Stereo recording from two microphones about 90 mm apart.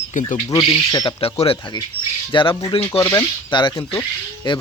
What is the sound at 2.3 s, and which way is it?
Speech, 65° left (ahead or behind).